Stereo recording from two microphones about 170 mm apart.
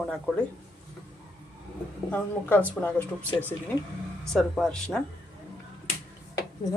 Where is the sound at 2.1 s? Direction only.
10° left (ahead or behind).